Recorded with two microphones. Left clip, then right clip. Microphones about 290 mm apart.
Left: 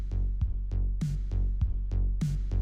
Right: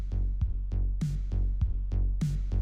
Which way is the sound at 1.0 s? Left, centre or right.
Centre.